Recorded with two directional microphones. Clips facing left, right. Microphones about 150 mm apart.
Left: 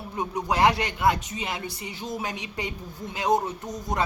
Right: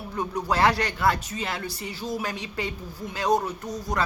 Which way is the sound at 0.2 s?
20° left (ahead or behind).